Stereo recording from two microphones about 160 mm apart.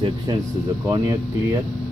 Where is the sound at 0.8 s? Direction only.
20° right (ahead or behind).